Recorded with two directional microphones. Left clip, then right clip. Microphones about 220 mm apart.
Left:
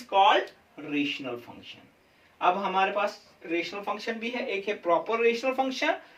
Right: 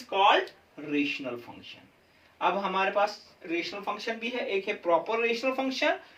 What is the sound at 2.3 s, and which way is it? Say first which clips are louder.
Speech: left 3 dB; 15° right (ahead or behind).